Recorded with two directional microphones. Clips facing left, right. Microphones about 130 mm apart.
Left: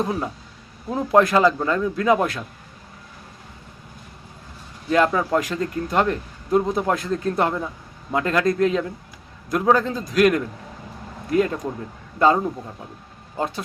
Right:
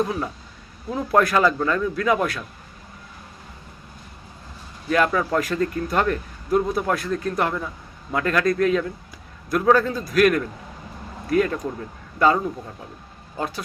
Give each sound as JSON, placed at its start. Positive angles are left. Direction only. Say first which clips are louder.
{"t": 0.0, "sound": "speech", "louder": "even", "side_deg": 25}
{"t": 4.9, "sound": "speech", "louder": "left 2 dB", "side_deg": 25}